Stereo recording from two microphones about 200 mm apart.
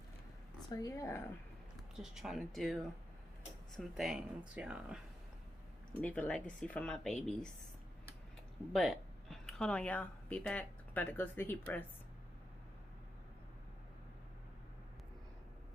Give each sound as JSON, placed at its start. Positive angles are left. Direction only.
{"t": 0.7, "sound": "speech", "side_deg": 15}
{"t": 2.0, "sound": "speech", "side_deg": 0}
{"t": 3.8, "sound": "speech", "side_deg": 0}
{"t": 6.0, "sound": "speech", "side_deg": 5}
{"t": 8.7, "sound": "speech", "side_deg": 0}